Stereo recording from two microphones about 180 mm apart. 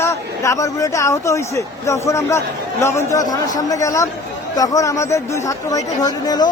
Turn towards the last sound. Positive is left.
turn(degrees=20)  # may be behind; listen again after turning